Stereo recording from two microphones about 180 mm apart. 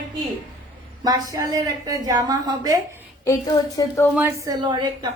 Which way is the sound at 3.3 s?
20° left (ahead or behind).